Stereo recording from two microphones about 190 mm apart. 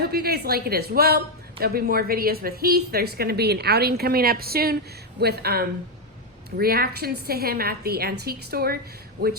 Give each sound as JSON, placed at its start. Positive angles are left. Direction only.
{"t": 0.0, "sound": "a woman's voice", "side_deg": -55}